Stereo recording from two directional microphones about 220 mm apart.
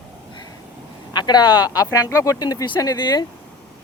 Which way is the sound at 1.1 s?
20° left (ahead or behind).